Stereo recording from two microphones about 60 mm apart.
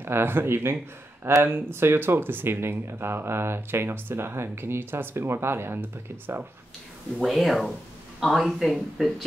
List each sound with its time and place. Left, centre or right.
0.0 s speech: right
7.2 s speech: centre